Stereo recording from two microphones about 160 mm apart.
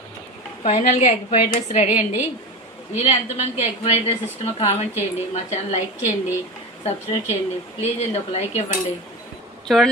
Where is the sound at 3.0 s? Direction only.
40° left (ahead or behind).